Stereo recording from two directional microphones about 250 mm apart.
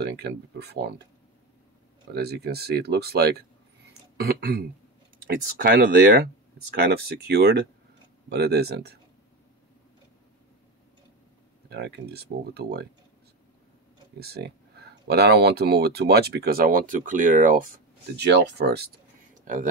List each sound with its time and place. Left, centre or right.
0.0 s speech: right
2.1 s speech: right
11.7 s speech: right
14.2 s speech: right
19.3 s a sound: right